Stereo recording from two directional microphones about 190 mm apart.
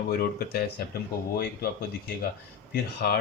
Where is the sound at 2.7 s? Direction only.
50° left (ahead or behind).